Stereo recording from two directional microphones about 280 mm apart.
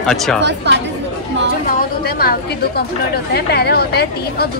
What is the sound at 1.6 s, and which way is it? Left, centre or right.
Speech, left.